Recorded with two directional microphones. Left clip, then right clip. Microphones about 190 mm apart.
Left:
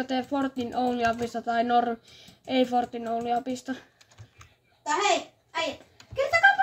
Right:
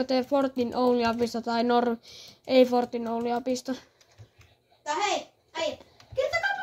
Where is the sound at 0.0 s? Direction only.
35° right (ahead or behind).